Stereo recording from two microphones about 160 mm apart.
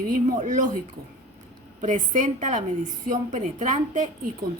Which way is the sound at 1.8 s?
55° right (ahead or behind).